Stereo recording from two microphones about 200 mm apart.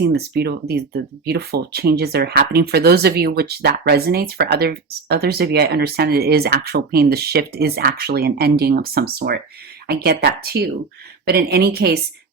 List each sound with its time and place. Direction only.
0.0 s speech: 55° right (ahead or behind)